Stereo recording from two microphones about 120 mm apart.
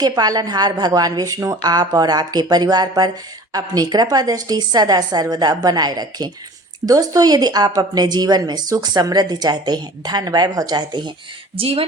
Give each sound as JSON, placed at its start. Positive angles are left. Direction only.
{"t": 0.0, "sound": "a woman's voice", "side_deg": -35}
{"t": 11.5, "sound": "speech", "side_deg": -50}